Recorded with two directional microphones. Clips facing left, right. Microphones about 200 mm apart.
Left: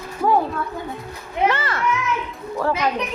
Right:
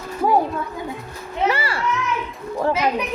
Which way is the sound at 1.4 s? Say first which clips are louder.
Left 1 dB; 10° right (ahead or behind).